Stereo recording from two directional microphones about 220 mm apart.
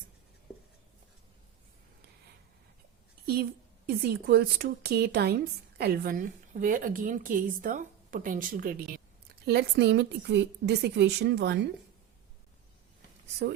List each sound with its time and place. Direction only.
3.8 s a woman's voice: 45° right (ahead or behind)